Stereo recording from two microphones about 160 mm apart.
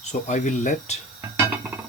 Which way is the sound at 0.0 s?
45° left (ahead or behind).